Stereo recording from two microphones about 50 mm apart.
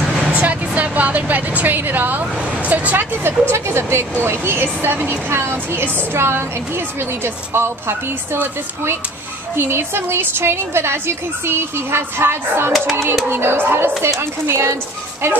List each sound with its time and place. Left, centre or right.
0.3 s speech: right
3.3 s a woman's voice: right
4.2 s speech: right
9.6 s a woman's voice: right